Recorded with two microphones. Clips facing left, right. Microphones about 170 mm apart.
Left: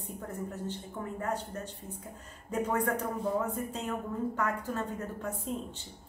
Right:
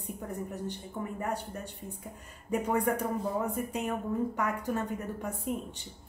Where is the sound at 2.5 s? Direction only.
10° right (ahead or behind).